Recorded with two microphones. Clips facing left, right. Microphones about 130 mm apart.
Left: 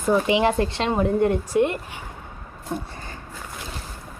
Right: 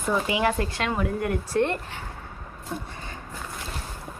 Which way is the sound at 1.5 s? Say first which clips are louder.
Left 3 dB; 10° left (ahead or behind).